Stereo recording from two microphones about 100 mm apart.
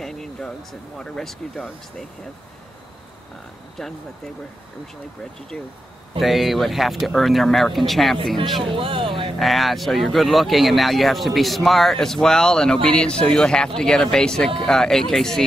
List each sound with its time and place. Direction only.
0.0 s speech: 5° left (ahead or behind)
6.1 s speech: centre (ahead or behind)
8.6 s speech: 60° right (ahead or behind)
9.4 s speech: centre (ahead or behind)